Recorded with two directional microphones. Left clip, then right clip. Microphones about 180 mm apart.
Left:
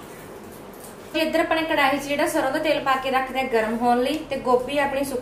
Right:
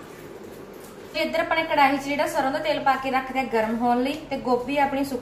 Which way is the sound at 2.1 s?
20° left (ahead or behind).